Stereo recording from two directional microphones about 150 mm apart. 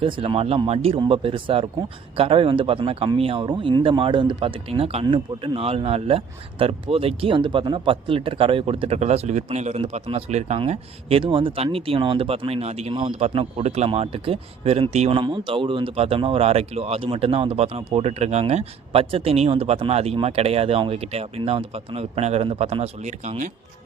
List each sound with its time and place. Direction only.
0.0 s speech: 35° right (ahead or behind)
10.6 s speech: 35° right (ahead or behind)
15.2 s speech: 35° right (ahead or behind); by 23.5 s 50° right (ahead or behind)